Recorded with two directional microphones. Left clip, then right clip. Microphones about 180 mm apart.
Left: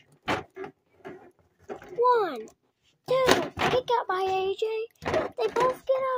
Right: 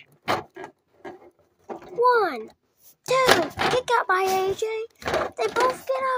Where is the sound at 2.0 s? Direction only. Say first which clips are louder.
Right 3 dB; 10° right (ahead or behind).